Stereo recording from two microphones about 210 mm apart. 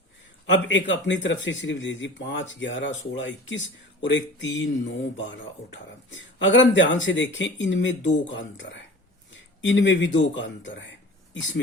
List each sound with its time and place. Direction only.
0.4 s speech: 60° left (ahead or behind)
9.3 s a sound: 60° left (ahead or behind)
10.2 s speech: 60° left (ahead or behind)